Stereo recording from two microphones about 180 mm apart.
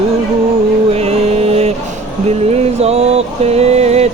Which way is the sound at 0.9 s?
35° right (ahead or behind).